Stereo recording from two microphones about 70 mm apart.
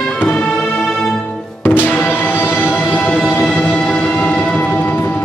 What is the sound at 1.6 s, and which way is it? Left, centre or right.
Music, left.